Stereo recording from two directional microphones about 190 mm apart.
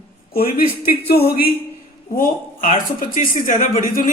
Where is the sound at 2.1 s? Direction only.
45° left (ahead or behind).